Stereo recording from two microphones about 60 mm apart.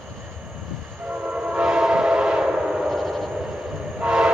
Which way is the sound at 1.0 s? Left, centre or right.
Right.